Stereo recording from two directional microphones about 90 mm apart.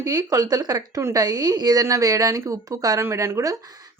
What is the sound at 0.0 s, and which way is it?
A woman's voice, 45° right (ahead or behind).